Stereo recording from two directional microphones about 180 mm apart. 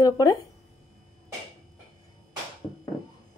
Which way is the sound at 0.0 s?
20° left (ahead or behind).